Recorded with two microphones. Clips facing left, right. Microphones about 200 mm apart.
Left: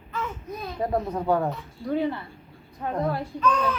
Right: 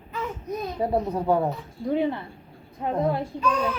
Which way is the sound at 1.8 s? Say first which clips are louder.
Right 2 dB; 20° right (ahead or behind).